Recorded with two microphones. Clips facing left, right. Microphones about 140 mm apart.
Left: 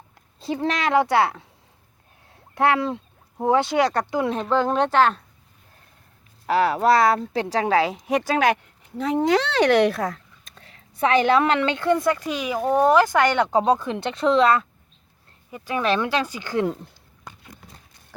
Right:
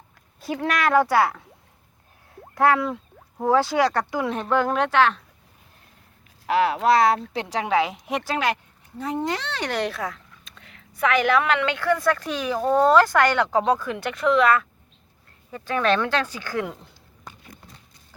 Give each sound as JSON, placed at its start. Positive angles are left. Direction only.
{"t": 0.3, "sound": "speech", "side_deg": 25}
{"t": 2.6, "sound": "speech", "side_deg": 25}
{"t": 6.5, "sound": "speech", "side_deg": 40}
{"t": 9.0, "sound": "speech", "side_deg": 85}
{"t": 15.5, "sound": "speech", "side_deg": 10}